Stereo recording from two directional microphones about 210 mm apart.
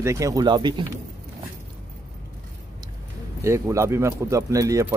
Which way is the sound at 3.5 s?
15° right (ahead or behind).